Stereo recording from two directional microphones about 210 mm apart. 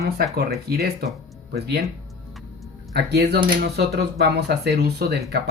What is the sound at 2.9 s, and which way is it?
Speech, 50° right (ahead or behind).